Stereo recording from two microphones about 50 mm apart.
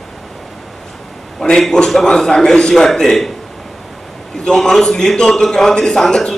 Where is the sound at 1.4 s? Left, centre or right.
Centre.